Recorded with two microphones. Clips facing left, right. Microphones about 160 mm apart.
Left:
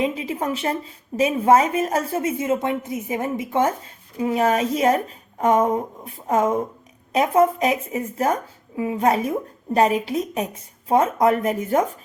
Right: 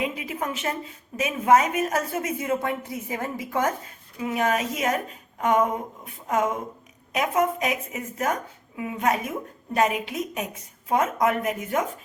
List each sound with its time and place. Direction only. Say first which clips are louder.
0.0 s a woman's voice: left 5 dB; 30° left (ahead or behind)